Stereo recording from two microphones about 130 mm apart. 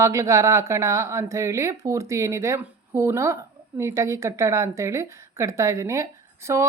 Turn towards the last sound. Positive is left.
turn(degrees=-20)  # may be behind; listen again after turning